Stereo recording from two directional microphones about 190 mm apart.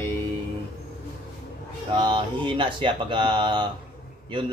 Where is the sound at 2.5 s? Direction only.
25° right (ahead or behind).